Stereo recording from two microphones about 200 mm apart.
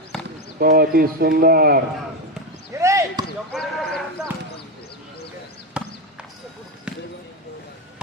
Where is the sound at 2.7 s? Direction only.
15° right (ahead or behind).